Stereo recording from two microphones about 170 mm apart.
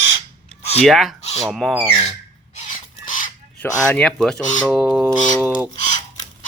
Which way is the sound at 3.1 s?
50° left (ahead or behind).